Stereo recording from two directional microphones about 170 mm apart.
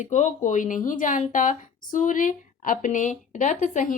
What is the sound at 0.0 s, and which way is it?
A woman's voice, 45° left (ahead or behind).